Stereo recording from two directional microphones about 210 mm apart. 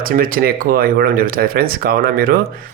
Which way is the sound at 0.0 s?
45° right (ahead or behind).